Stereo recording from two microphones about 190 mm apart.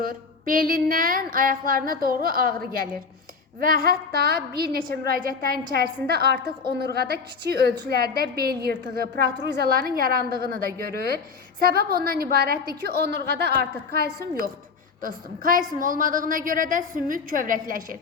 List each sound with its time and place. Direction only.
0.0 s a woman's voice: 50° right (ahead or behind)